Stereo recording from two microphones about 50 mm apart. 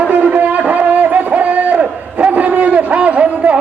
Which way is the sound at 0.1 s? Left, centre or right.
Right.